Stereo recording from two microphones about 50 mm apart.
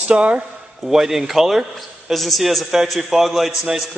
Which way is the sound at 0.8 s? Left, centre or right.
Centre.